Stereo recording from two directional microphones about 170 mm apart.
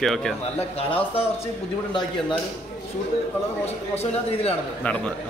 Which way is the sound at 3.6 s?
35° left (ahead or behind).